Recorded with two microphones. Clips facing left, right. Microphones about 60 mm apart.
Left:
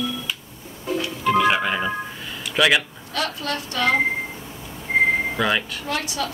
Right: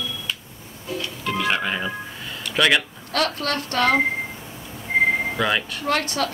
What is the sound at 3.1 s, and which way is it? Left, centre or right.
Speech, right.